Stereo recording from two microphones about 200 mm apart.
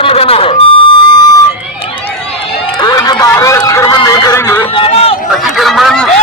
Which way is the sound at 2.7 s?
20° left (ahead or behind).